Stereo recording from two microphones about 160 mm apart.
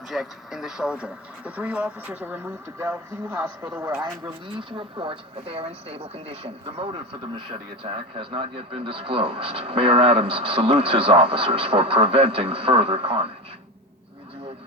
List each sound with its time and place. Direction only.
0.1 s speech: centre (ahead or behind)
4.0 s speech: 30° right (ahead or behind)